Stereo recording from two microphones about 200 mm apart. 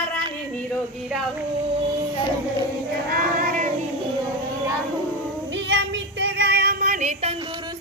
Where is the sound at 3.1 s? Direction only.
45° right (ahead or behind).